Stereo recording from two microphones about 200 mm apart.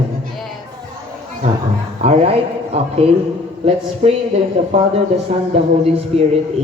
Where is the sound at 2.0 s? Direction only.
30° right (ahead or behind).